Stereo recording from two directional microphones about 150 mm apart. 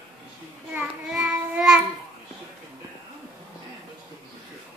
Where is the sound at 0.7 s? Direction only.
5° right (ahead or behind).